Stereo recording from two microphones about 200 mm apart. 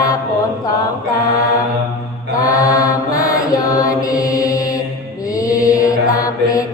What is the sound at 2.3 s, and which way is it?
Mantra, 15° left (ahead or behind).